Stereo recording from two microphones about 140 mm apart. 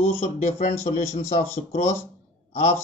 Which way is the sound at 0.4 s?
55° left (ahead or behind).